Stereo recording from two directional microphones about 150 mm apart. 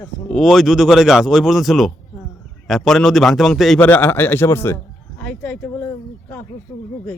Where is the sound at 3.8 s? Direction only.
10° left (ahead or behind).